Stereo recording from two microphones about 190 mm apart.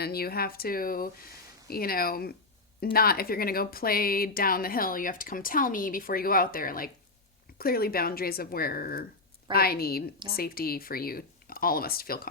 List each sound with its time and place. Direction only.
0.0 s speech: 55° left (ahead or behind)